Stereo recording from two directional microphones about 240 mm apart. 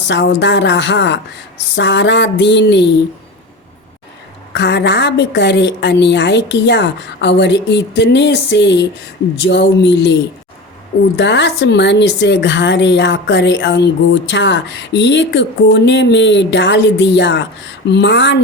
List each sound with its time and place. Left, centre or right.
0.1 s a woman's voice: left
4.5 s a woman's voice: left
11.2 s a woman's voice: left